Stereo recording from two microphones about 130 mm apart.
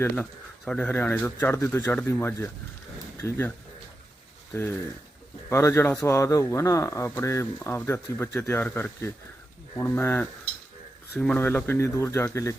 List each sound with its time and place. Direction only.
0.2 s speech: 5° left (ahead or behind)
4.5 s speech: 15° left (ahead or behind)